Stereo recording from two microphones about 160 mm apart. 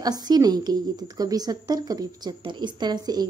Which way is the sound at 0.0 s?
25° right (ahead or behind).